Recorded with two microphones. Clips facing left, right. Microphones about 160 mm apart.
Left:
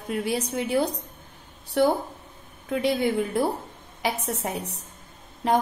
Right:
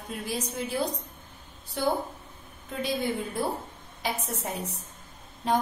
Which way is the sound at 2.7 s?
75° left (ahead or behind).